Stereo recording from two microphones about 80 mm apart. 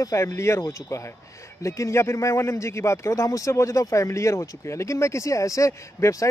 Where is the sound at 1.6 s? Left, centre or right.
Left.